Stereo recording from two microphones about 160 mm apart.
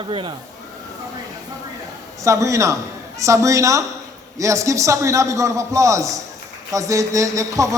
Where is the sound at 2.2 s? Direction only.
20° right (ahead or behind).